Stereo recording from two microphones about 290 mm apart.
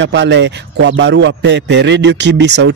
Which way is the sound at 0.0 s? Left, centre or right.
Right.